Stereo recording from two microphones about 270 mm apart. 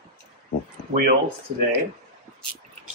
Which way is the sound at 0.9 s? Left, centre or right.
Right.